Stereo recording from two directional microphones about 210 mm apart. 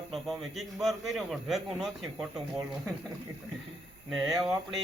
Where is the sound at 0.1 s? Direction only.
Centre (ahead or behind).